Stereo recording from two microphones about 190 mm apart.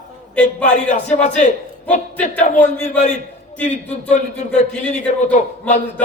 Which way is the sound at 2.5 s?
40° left (ahead or behind).